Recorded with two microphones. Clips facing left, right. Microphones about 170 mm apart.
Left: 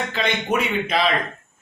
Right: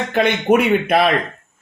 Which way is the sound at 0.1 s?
55° right (ahead or behind).